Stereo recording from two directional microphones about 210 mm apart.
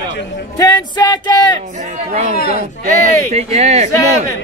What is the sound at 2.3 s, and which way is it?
Speech, 45° left (ahead or behind).